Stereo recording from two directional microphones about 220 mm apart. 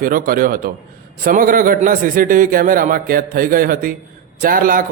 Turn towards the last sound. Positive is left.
turn(degrees=-40)  # may be behind; listen again after turning